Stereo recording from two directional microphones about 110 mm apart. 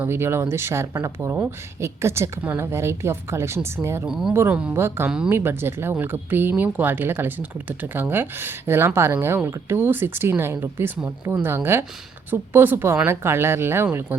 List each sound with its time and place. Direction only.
0.0 s speech: 20° right (ahead or behind)
4.0 s speech: 5° right (ahead or behind); by 5.0 s 25° right (ahead or behind)
5.0 s speech: 5° right (ahead or behind)
5.3 s speech: 20° right (ahead or behind)